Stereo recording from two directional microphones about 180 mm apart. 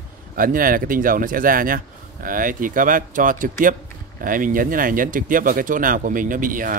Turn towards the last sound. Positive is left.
turn(degrees=-50)  # may be behind; listen again after turning